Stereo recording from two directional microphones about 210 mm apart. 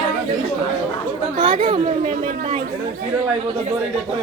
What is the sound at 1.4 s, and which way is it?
Chatter, 25° right (ahead or behind).